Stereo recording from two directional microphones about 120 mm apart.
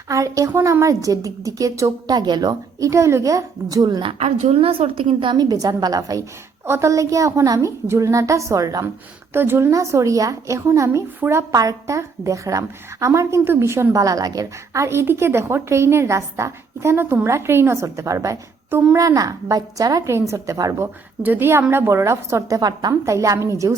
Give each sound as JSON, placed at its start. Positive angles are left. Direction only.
{"t": 0.1, "sound": "a woman's voice", "side_deg": -25}
{"t": 4.5, "sound": "a woman's voice", "side_deg": -50}
{"t": 9.3, "sound": "a woman's voice", "side_deg": -20}